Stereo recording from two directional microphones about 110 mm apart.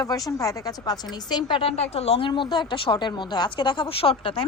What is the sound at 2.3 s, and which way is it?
Speech, 45° left (ahead or behind).